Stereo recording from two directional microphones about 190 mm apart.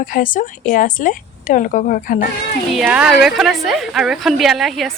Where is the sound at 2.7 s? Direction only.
5° right (ahead or behind).